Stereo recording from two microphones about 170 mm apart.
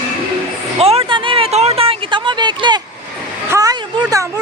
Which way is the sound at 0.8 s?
35° right (ahead or behind).